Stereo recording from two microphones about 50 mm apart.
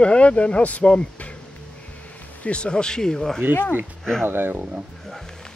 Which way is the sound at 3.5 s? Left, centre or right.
Left.